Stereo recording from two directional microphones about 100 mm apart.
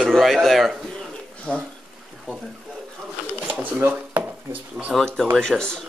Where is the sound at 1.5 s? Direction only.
10° left (ahead or behind).